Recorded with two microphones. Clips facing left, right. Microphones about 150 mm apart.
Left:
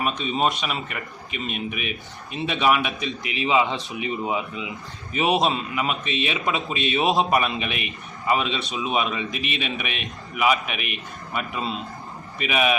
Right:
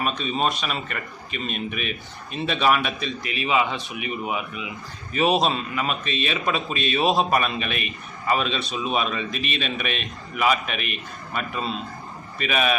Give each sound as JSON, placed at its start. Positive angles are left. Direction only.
{"t": 0.0, "sound": "a man's voice", "side_deg": 20}